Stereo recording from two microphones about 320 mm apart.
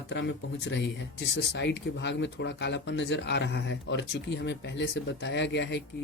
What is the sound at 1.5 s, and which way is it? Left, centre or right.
Speech, left.